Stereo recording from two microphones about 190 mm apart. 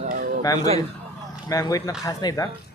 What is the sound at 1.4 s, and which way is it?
Speech, 20° left (ahead or behind).